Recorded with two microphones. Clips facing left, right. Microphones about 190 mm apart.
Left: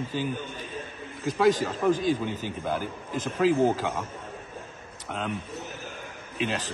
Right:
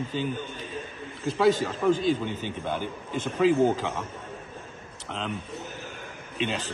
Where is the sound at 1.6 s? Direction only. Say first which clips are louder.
Even; 10° left (ahead or behind).